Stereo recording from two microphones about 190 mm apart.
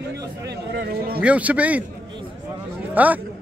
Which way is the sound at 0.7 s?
50° right (ahead or behind).